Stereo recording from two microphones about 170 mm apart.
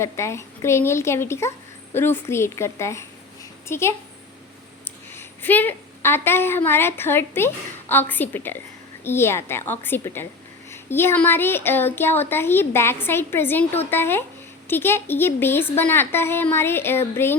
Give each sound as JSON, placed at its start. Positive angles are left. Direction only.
{"t": 0.0, "sound": "a woman's voice", "side_deg": 15}